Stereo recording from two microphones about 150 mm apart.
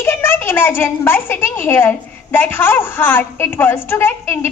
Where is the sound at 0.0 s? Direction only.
15° left (ahead or behind).